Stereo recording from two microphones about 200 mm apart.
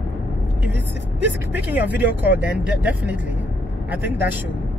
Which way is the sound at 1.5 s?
10° right (ahead or behind).